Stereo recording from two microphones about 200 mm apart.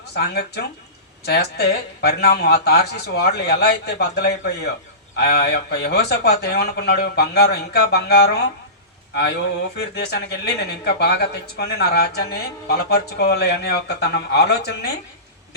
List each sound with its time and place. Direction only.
0.1 s speech: 55° left (ahead or behind)